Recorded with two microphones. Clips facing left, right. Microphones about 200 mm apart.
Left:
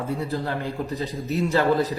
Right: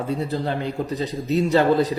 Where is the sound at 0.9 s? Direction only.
75° right (ahead or behind).